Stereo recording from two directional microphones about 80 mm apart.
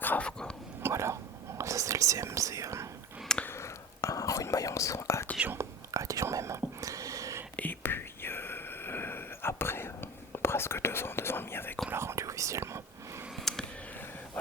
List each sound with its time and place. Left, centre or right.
0.0 s whispering: centre
0.8 s whispering: right
3.4 s whispering: left
5.5 s whispering: right
7.5 s whispering: left
11.9 s whispering: right
13.3 s a sound: centre